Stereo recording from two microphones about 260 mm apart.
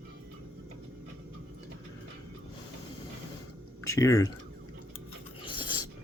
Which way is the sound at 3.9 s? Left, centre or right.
Centre.